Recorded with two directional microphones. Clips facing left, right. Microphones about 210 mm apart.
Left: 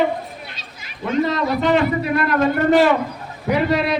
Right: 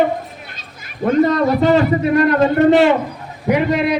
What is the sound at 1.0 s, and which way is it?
A man's voice, 50° right (ahead or behind).